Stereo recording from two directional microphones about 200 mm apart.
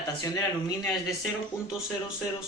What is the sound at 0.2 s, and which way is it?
Speech, 15° left (ahead or behind).